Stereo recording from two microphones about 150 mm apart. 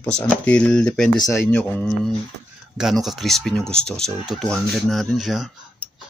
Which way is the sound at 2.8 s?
Centre (ahead or behind).